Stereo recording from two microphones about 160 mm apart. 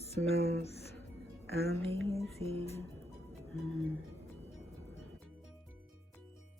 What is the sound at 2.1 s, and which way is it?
Music, 40° right (ahead or behind).